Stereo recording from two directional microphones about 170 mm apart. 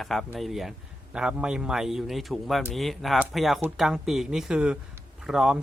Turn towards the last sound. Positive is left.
turn(degrees=-5)  # may be behind; listen again after turning